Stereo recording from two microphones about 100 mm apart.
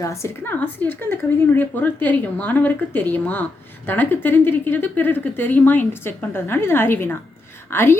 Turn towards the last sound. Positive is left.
turn(degrees=25)  # may be behind; listen again after turning